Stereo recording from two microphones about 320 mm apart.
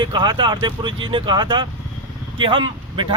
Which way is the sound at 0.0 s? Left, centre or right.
Centre.